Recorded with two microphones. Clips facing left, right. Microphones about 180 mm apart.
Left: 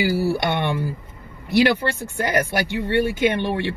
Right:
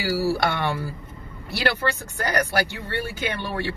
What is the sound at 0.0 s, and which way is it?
Speech, 20° left (ahead or behind).